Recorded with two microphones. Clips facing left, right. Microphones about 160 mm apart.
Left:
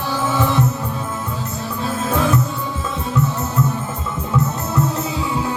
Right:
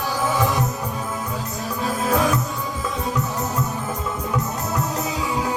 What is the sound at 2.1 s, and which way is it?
Music, 25° left (ahead or behind).